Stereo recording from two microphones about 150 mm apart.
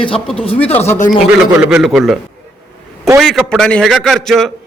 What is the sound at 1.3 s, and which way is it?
A man's voice, 5° right (ahead or behind).